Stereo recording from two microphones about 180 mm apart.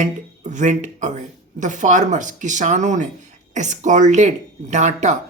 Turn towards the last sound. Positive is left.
turn(degrees=-40)  # may be behind; listen again after turning